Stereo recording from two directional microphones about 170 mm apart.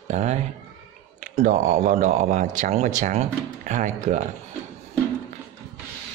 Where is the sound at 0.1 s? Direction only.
40° right (ahead or behind).